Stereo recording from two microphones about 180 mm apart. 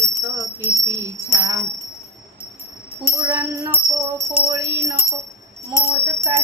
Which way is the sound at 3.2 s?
20° right (ahead or behind).